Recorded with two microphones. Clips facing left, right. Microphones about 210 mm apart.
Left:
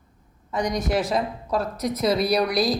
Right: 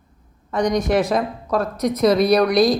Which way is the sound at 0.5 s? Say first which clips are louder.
Right 6 dB; 5° left (ahead or behind).